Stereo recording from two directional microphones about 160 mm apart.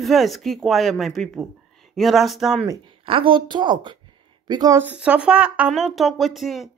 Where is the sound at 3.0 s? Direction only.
35° right (ahead or behind).